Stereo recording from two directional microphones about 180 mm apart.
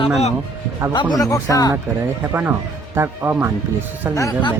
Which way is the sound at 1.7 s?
15° right (ahead or behind).